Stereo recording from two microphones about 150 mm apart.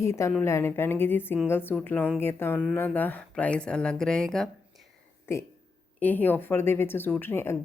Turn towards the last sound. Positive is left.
turn(degrees=15)  # may be behind; listen again after turning